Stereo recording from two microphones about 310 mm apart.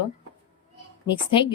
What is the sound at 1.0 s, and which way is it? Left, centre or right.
Speech, centre.